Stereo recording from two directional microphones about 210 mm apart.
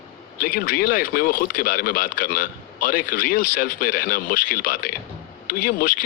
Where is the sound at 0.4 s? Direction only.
45° left (ahead or behind).